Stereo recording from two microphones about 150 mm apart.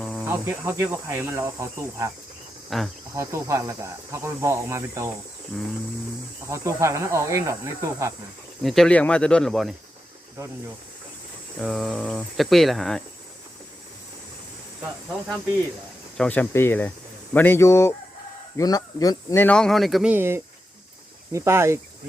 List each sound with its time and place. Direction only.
0.0 s insect: centre (ahead or behind)
0.3 s speech: 15° right (ahead or behind)
2.6 s speech: centre (ahead or behind)
3.2 s speech: 20° right (ahead or behind)
6.5 s speech: 20° right (ahead or behind)
8.6 s speech: centre (ahead or behind)
11.6 s speech: centre (ahead or behind)
16.1 s speech: 10° left (ahead or behind); by 21.8 s 20° right (ahead or behind)